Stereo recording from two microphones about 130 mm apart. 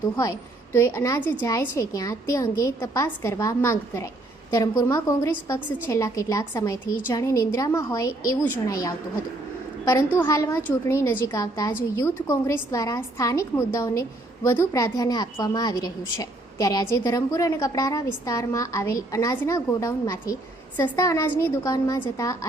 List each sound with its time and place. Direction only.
0.2 s a woman's voice: 20° left (ahead or behind)